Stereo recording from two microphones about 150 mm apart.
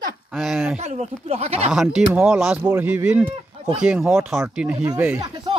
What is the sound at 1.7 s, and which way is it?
Speech, 5° right (ahead or behind).